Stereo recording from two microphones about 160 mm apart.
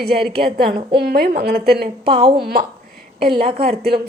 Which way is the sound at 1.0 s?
80° right.